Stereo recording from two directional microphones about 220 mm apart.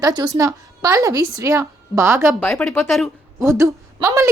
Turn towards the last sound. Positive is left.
turn(degrees=-15)  # may be behind; listen again after turning